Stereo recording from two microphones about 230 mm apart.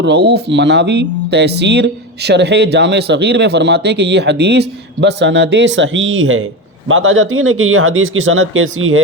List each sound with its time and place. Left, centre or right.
0.0 s speech: right